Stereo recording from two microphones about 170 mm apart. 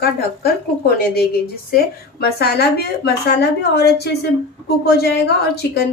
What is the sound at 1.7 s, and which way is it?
A woman's voice, 70° left (ahead or behind).